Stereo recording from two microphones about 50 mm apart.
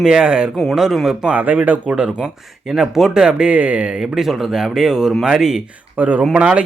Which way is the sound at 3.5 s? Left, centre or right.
Right.